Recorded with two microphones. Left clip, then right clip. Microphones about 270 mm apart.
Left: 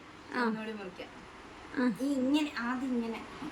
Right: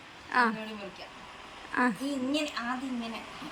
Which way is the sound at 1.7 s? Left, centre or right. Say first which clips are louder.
Right 5 dB; centre.